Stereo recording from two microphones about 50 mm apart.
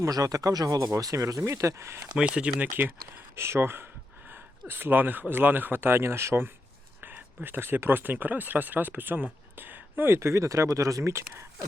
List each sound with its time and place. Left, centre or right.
0.0 s speech: right
2.1 s speech: centre
2.6 s speech: right
3.3 s speech: right
4.3 s a sound: right
5.3 s speech: right
7.0 s speech: right
10.2 s speech: right